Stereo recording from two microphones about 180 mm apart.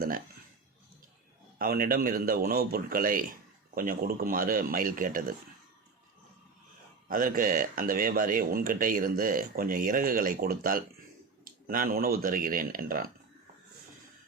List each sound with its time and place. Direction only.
1.5 s speech: 55° right (ahead or behind)
7.1 s speech: 50° right (ahead or behind)